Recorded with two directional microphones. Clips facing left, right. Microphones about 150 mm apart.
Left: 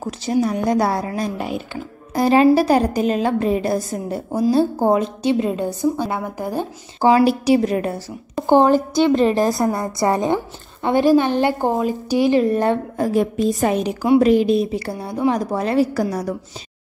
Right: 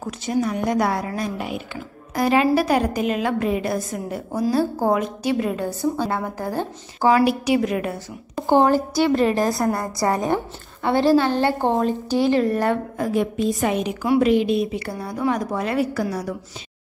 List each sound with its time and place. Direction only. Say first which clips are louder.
0.0 s a woman's voice: left 3 dB; 30° left (ahead or behind)
7.0 s a woman's voice: left 3 dB; 25° left (ahead or behind)
8.5 s a woman's voice: left 3 dB; 20° left (ahead or behind)
11.5 s a woman's voice: left 1 dB; 5° left (ahead or behind); by 12.7 s 20° left (ahead or behind)
12.9 s a woman's voice: left 3 dB; 40° left (ahead or behind)
14.9 s a woman's voice: left 3 dB; 25° left (ahead or behind); by 16.3 s 40° left (ahead or behind)